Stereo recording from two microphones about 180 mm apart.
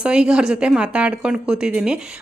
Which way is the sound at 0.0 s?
5° right (ahead or behind).